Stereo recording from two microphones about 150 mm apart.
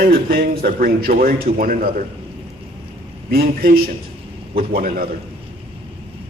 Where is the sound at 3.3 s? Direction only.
85° right.